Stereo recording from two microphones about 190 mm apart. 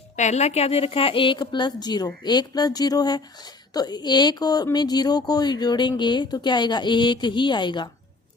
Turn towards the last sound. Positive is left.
turn(degrees=25)  # may be behind; listen again after turning